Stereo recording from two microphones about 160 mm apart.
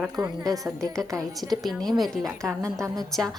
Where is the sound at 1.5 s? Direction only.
Centre (ahead or behind).